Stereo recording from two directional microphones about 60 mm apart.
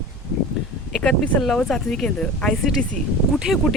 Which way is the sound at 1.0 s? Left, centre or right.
Centre.